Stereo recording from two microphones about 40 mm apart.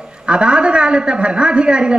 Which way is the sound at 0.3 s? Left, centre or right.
Right.